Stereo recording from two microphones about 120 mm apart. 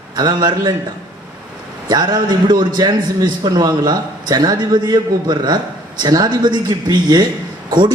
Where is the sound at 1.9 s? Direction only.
35° right (ahead or behind).